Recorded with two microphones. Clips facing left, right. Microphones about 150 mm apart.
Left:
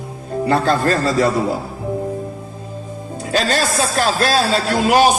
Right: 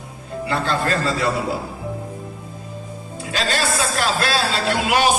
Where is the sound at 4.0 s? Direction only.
40° left (ahead or behind).